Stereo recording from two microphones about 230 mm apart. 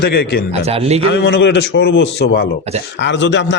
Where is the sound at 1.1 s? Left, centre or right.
Left.